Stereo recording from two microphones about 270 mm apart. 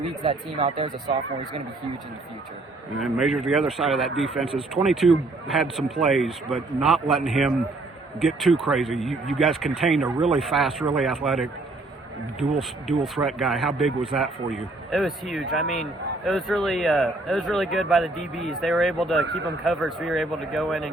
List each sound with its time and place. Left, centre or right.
0.3 s speech: centre
3.0 s a man's voice: centre
13.0 s a man's voice: centre